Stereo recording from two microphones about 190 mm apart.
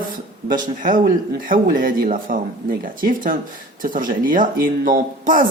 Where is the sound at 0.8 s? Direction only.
45° right (ahead or behind).